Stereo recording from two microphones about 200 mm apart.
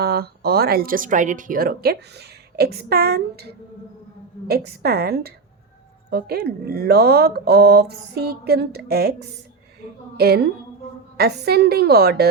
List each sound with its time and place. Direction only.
0.0 s speech: 50° right (ahead or behind)
10.2 s speech: 50° right (ahead or behind)